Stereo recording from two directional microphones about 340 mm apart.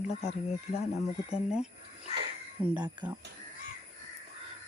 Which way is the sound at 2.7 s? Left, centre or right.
Centre.